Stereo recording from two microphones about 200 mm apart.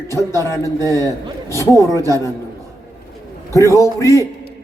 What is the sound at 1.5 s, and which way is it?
Speech, 15° left (ahead or behind).